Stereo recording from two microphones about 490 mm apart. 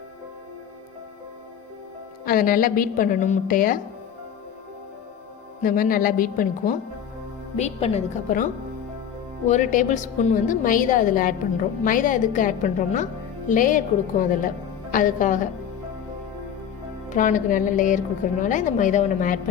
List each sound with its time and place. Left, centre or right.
2.2 s a woman's voice: centre
5.6 s a woman's voice: centre
9.5 s a woman's voice: centre
17.1 s a woman's voice: centre